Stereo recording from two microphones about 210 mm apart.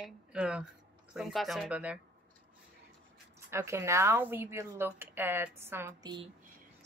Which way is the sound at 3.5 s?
15° right (ahead or behind).